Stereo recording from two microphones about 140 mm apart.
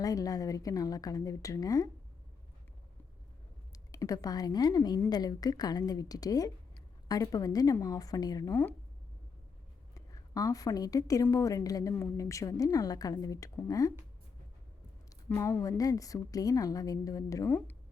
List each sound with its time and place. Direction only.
0.0 s a woman's voice: 25° left (ahead or behind)
3.9 s a woman's voice: 25° left (ahead or behind)
9.9 s a woman's voice: 25° left (ahead or behind)
15.3 s a woman's voice: 15° left (ahead or behind)